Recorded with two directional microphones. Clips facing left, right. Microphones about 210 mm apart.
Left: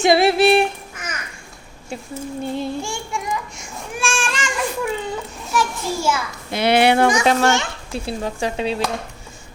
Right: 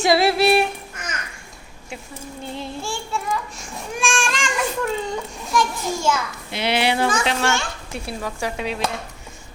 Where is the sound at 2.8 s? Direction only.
15° left (ahead or behind).